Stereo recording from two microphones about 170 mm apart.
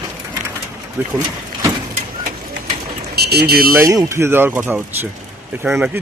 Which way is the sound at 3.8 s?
15° right (ahead or behind).